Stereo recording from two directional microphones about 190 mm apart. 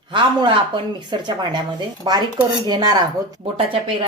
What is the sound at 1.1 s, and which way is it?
Speech, 25° right (ahead or behind).